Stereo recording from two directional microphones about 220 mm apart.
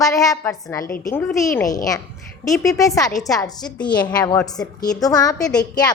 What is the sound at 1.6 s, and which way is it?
A woman's voice, 15° left (ahead or behind).